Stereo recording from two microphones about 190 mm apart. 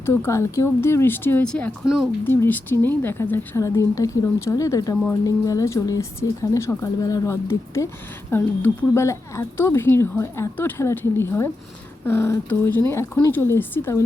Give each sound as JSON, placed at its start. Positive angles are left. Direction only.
{"t": 0.0, "sound": "speech", "side_deg": 15}